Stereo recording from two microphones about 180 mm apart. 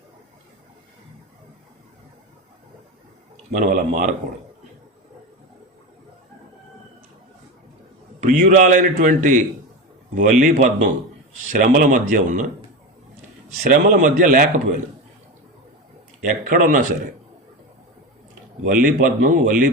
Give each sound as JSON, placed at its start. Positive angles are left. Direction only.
{"t": 3.6, "sound": "a man's voice", "side_deg": -45}
{"t": 8.2, "sound": "a man's voice", "side_deg": -45}
{"t": 13.6, "sound": "a man's voice", "side_deg": -50}
{"t": 16.2, "sound": "a man's voice", "side_deg": -50}
{"t": 18.6, "sound": "a man's voice", "side_deg": -50}